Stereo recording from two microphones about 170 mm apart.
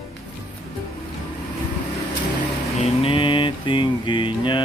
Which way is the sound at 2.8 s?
35° left (ahead or behind).